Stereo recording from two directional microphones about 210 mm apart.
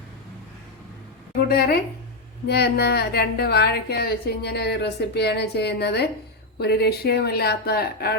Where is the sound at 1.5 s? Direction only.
50° left (ahead or behind).